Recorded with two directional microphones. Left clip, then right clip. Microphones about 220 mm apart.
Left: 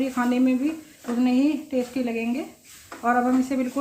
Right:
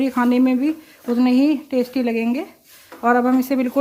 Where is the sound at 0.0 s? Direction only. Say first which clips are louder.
Right 5 dB; 45° right (ahead or behind).